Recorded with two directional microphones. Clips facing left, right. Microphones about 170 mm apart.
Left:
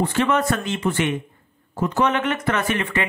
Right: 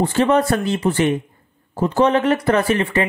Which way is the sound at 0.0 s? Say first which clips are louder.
Right 4 dB; 35° right (ahead or behind).